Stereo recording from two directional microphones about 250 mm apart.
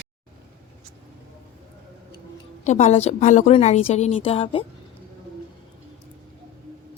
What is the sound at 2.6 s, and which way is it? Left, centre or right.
Speech, left.